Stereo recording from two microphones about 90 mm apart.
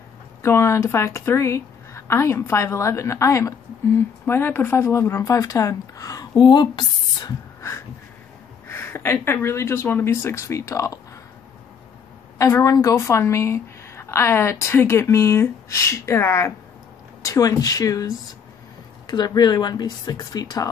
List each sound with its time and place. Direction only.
0.4 s a woman's voice: 30° left (ahead or behind)
6.3 s speech: 55° left (ahead or behind)
8.6 s a woman's voice: 30° left (ahead or behind)
12.4 s a woman's voice: 40° left (ahead or behind)